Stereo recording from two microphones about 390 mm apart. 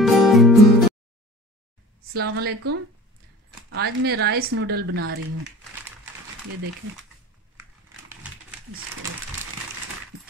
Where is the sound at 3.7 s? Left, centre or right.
Right.